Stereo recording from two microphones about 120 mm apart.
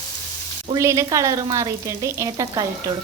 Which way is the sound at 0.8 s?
25° right (ahead or behind).